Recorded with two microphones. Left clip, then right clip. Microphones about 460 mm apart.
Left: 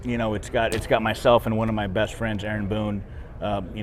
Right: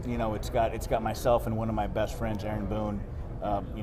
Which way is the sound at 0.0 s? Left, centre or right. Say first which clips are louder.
Left 5 dB; left.